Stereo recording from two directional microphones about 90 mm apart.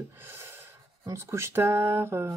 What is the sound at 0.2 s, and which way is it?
Speech, 30° right (ahead or behind).